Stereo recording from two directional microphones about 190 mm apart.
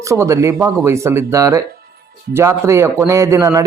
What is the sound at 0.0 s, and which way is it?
A man's voice, 15° right (ahead or behind).